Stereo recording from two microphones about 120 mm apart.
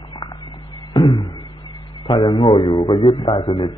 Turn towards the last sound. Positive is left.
turn(degrees=40)  # may be behind; listen again after turning